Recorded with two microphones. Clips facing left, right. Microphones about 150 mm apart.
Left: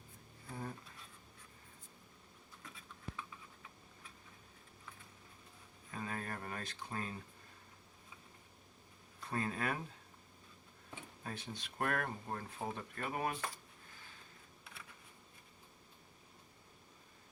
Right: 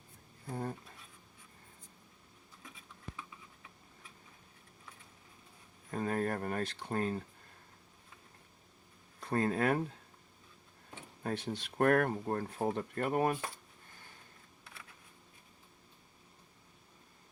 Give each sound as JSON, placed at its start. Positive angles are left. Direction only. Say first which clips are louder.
{"t": 0.4, "sound": "speech", "louder": "right 6 dB", "side_deg": -40}
{"t": 5.9, "sound": "a sound", "louder": "right 10 dB", "side_deg": -50}
{"t": 9.3, "sound": "speech", "louder": "right 8 dB", "side_deg": -55}
{"t": 11.2, "sound": "speech", "louder": "right 10 dB", "side_deg": -55}